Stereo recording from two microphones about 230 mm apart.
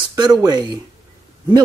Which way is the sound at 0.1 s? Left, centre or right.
Centre.